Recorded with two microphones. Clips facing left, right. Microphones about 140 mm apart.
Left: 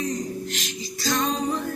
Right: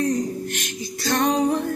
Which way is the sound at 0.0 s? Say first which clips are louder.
Right 5 dB; 60° right (ahead or behind).